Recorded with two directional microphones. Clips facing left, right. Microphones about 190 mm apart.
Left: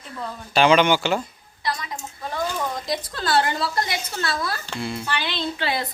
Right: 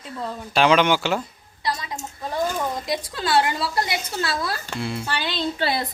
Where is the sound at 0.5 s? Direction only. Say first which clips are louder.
Left 1 dB; centre (ahead or behind).